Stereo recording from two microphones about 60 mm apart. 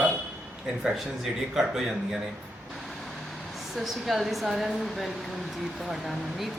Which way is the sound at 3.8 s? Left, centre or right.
Centre.